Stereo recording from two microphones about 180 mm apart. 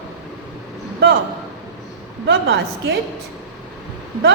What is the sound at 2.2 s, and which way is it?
Speech, 65° right (ahead or behind).